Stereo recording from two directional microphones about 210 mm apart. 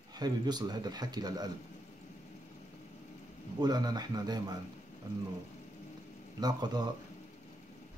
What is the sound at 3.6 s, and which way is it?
Speech, 20° right (ahead or behind).